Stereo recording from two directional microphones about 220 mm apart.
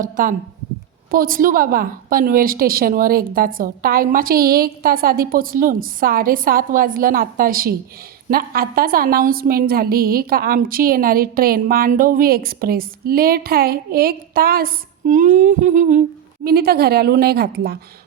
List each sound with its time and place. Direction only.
0.0 s a woman's voice: 40° right (ahead or behind)